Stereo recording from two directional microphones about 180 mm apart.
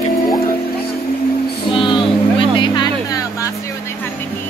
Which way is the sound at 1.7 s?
25° left (ahead or behind).